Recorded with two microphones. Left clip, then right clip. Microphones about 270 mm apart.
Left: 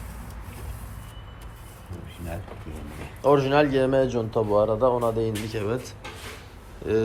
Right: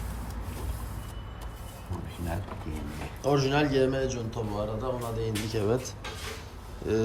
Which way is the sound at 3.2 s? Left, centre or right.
Centre.